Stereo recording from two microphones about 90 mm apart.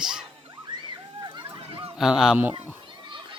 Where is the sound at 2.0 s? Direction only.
5° right (ahead or behind).